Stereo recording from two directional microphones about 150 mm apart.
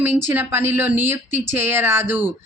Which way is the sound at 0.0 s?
15° right (ahead or behind).